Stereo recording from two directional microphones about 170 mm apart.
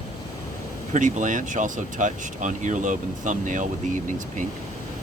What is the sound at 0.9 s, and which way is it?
Speech, 50° right (ahead or behind).